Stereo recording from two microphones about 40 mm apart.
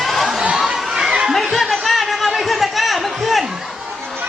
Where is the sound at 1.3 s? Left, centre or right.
Centre.